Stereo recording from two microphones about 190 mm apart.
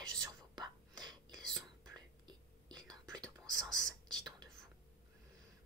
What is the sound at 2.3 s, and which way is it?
Whispering, 20° right (ahead or behind).